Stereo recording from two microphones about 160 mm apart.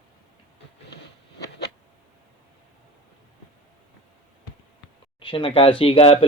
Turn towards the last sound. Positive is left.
turn(degrees=35)  # may be behind; listen again after turning